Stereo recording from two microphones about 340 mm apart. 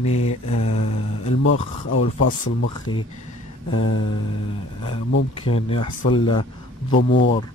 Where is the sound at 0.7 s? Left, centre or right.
Centre.